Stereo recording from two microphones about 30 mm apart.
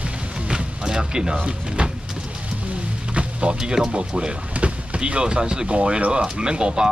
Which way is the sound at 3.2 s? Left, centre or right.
Right.